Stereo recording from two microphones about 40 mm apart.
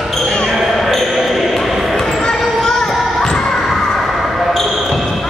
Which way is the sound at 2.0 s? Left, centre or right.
Centre.